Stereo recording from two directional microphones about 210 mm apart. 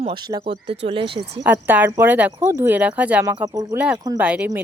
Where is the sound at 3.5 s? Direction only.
15° right (ahead or behind).